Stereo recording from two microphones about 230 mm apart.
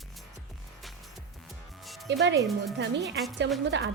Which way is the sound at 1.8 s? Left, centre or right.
Centre.